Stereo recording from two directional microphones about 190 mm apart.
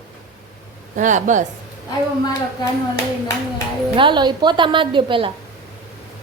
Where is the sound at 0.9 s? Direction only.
40° right (ahead or behind).